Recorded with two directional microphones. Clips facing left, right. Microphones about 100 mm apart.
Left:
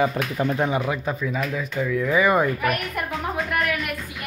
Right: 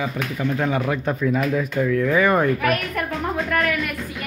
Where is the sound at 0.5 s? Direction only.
15° left (ahead or behind).